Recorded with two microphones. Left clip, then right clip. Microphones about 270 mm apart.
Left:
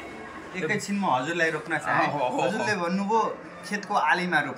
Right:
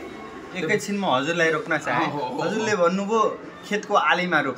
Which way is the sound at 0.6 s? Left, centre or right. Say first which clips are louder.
Right 3 dB; centre.